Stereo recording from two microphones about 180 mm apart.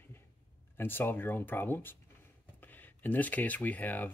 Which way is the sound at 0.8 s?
10° left (ahead or behind).